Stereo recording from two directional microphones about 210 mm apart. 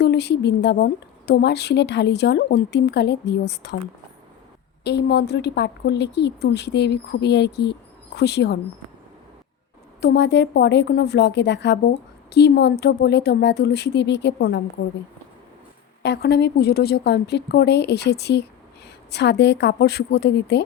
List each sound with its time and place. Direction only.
0.0 s a woman's voice: 55° left (ahead or behind)
4.8 s speech: 55° left (ahead or behind)
10.0 s a woman's voice: 55° left (ahead or behind)
16.0 s speech: 50° left (ahead or behind)